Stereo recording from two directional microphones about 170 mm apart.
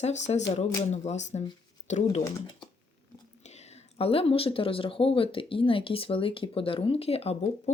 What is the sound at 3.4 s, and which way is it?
Speech, 40° left (ahead or behind).